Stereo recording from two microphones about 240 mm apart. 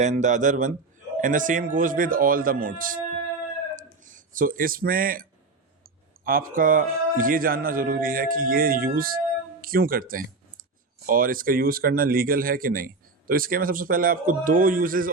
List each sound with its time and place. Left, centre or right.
0.0 s speech: right
3.8 s a sound: right
6.2 s speech: right